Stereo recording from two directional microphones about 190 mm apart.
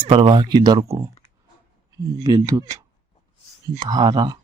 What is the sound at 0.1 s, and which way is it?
Speech, 25° right (ahead or behind).